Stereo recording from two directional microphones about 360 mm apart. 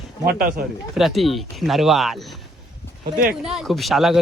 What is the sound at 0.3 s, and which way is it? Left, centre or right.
Speech, right.